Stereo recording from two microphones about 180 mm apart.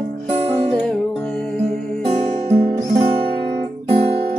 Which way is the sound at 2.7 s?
20° right (ahead or behind).